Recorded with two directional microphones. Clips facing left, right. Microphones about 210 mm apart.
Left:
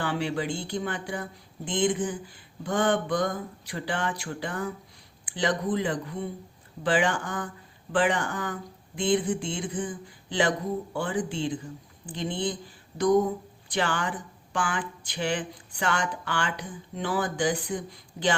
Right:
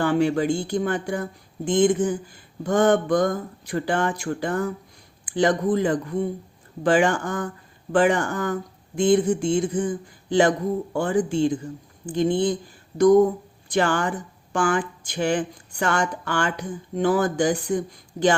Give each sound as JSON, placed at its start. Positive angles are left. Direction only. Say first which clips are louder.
{"t": 0.0, "sound": "speech", "louder": "right 8 dB", "side_deg": -45}
{"t": 13.7, "sound": "speech", "louder": "right 6 dB", "side_deg": -45}